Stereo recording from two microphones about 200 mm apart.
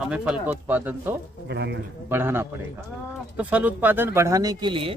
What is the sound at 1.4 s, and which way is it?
Speech, 60° right (ahead or behind).